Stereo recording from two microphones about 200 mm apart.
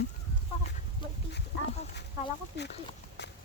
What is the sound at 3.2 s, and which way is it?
Horse, 60° left (ahead or behind).